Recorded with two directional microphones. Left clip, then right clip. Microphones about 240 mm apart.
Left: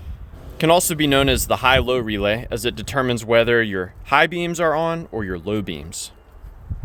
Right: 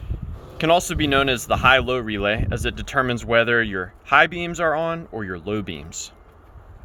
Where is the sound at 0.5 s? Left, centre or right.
Centre.